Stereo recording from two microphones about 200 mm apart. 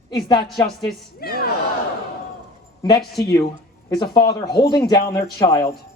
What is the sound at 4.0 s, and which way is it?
Speech, 20° left (ahead or behind).